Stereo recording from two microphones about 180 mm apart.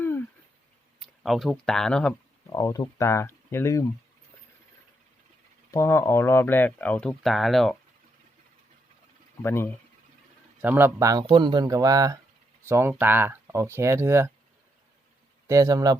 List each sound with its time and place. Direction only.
0.0 s a sound: 10° left (ahead or behind)
0.9 s speech: centre (ahead or behind)
2.6 s speech: 20° left (ahead or behind)
5.7 s speech: 15° left (ahead or behind)
9.4 s speech: 15° left (ahead or behind)
10.6 s speech: 10° right (ahead or behind)
15.4 s speech: 20° right (ahead or behind)